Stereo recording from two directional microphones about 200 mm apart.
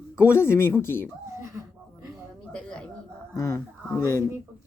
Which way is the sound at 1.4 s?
15° right (ahead or behind).